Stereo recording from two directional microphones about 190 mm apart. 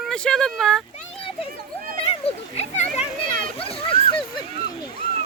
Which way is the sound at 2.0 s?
30° left (ahead or behind).